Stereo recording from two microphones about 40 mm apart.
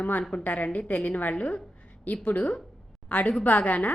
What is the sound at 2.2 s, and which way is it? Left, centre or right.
A woman's voice, left.